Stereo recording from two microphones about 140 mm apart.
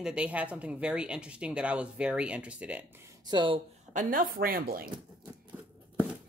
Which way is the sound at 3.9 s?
80° right.